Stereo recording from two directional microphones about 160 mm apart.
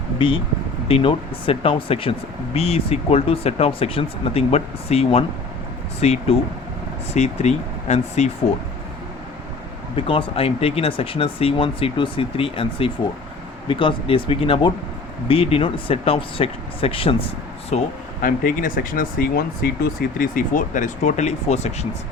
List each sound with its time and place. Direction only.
0.2 s speech: 35° left (ahead or behind)
9.9 s speech: 35° left (ahead or behind)
18.2 s speech: 60° left (ahead or behind); by 21.8 s 40° left (ahead or behind)